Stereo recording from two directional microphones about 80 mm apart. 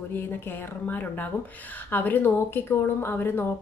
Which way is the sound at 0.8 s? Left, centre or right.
Left.